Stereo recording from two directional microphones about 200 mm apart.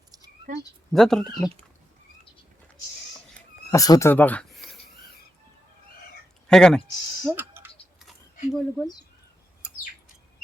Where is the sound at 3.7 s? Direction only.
15° left (ahead or behind).